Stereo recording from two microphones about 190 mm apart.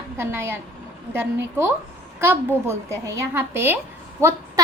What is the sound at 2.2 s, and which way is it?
A child's voice, 10° right (ahead or behind).